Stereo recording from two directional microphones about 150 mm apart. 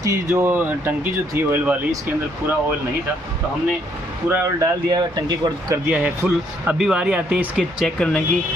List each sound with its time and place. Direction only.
0.0 s speech: 20° right (ahead or behind)
4.3 s speech: 20° right (ahead or behind)
5.9 s speech: 10° right (ahead or behind)